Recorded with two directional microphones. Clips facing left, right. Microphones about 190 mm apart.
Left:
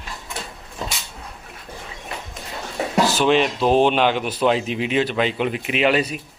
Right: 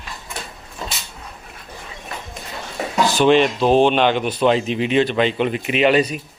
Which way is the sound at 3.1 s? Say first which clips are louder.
Right 6 dB; centre (ahead or behind).